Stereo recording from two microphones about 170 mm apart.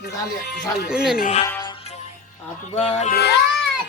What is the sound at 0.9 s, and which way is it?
Speech, 5° right (ahead or behind).